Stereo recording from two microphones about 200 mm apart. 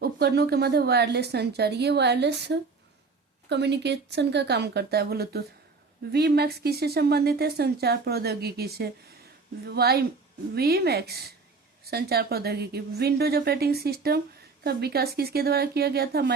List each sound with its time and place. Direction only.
0.0 s a woman's voice: 55° right (ahead or behind)